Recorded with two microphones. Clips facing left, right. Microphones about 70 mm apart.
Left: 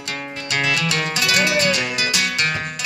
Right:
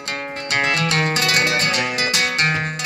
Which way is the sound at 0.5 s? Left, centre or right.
Right.